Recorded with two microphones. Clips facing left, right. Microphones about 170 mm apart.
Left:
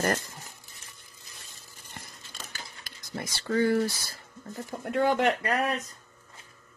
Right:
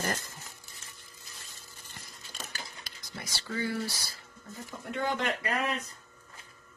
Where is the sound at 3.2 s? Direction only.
50° left (ahead or behind).